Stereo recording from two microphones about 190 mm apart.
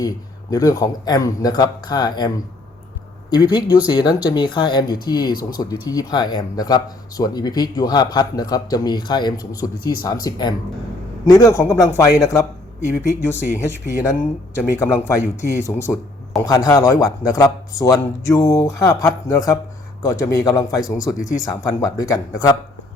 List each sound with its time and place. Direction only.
0.5 s speech: 20° left (ahead or behind)